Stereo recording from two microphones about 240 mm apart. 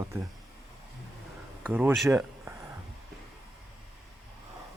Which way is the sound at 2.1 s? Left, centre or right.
Centre.